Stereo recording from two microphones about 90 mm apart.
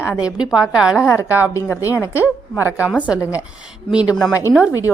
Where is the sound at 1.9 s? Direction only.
35° left (ahead or behind).